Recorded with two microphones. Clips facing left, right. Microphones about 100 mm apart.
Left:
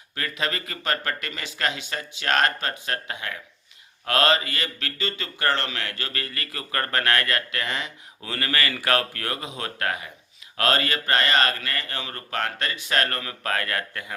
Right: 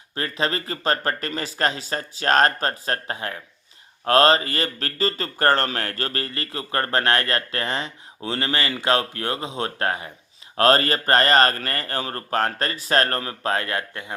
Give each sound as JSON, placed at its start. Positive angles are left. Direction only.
{"t": 0.1, "sound": "speech", "side_deg": -30}